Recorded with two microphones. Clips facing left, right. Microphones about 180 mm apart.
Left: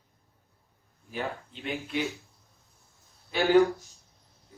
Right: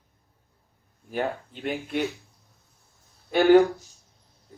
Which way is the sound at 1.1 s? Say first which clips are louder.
Right 6 dB; 50° right (ahead or behind).